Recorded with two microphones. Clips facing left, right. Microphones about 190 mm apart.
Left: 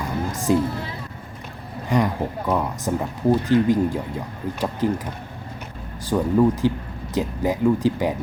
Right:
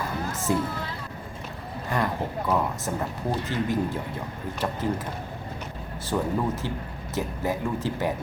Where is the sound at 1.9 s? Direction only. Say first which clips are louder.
Left 6 dB; 15° left (ahead or behind).